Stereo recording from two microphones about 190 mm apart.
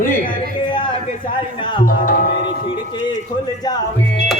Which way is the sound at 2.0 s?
45° left (ahead or behind).